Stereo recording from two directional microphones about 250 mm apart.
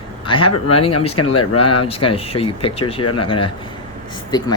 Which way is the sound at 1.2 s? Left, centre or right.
Left.